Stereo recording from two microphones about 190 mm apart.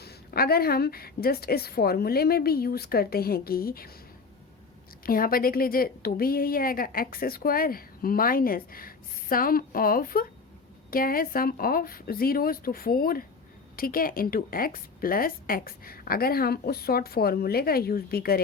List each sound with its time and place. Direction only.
0.0 s a woman's voice: 55° left (ahead or behind)
5.0 s a woman's voice: 50° left (ahead or behind)